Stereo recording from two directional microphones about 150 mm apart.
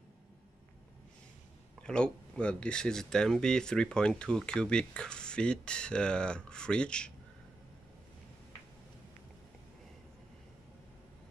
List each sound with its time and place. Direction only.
1.8 s speech: 5° left (ahead or behind)